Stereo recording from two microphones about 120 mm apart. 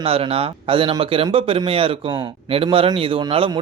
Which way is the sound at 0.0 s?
55° right (ahead or behind).